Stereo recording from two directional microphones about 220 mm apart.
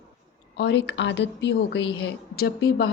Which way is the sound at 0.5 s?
50° left (ahead or behind).